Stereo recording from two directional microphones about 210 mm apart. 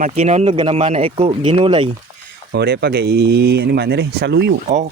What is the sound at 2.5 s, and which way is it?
Speech, 50° right (ahead or behind).